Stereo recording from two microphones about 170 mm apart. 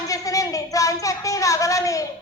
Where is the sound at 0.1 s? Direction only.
20° left (ahead or behind).